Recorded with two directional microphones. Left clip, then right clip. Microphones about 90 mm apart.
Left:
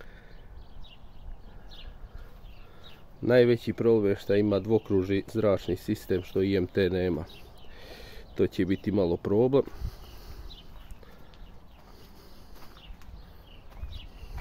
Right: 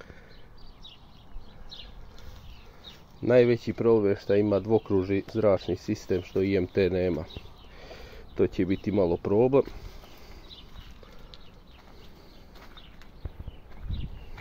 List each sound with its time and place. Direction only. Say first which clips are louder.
3.2 s speech: right 1 dB; 25° left (ahead or behind)
7.8 s a sound: right 1 dB; 15° left (ahead or behind)
9.2 s speech: right 1 dB; 25° left (ahead or behind)